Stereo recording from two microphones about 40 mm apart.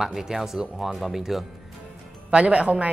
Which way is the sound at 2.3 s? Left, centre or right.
Right.